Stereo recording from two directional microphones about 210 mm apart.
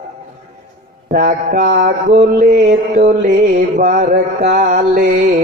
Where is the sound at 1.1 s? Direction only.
40° right (ahead or behind).